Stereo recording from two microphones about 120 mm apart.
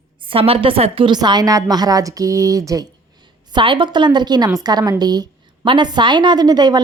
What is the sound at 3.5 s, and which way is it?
A woman's voice, 45° right (ahead or behind).